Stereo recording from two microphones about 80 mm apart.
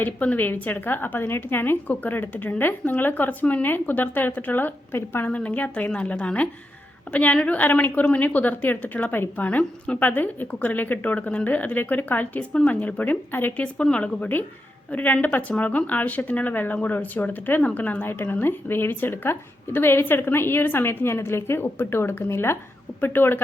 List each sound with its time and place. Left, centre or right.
0.0 s a woman's voice: left
5.3 s a woman's voice: centre